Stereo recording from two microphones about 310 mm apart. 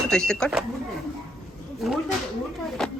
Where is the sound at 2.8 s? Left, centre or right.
Centre.